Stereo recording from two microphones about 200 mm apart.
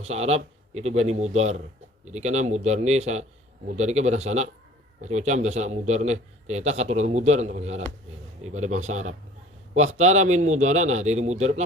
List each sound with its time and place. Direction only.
0.0 s a man's voice: 30° right (ahead or behind)